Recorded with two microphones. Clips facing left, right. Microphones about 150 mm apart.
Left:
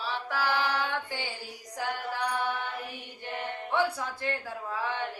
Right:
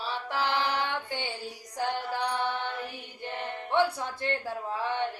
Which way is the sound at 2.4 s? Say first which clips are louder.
Right 1 dB; 25° right (ahead or behind).